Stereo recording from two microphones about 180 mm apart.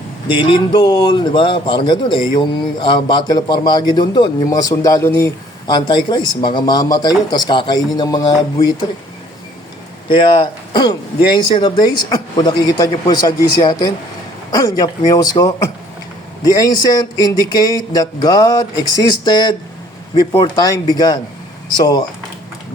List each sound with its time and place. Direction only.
0.3 s a man's voice: 25° left (ahead or behind)
5.7 s a man's voice: 25° left (ahead or behind)
10.1 s a man's voice: 25° left (ahead or behind)